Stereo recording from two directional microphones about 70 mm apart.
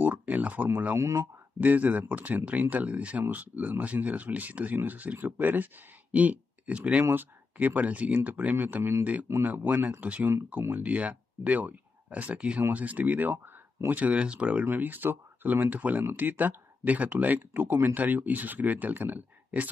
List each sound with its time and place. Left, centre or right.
0.0 s a sound: right
0.9 s speech: right
1.6 s speech: right
14.7 s speech: right